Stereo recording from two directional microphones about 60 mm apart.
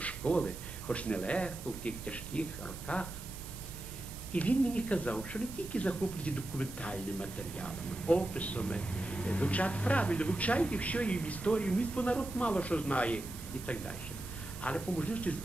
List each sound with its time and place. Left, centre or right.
0.0 s speech: centre
4.3 s speech: left
14.6 s speech: left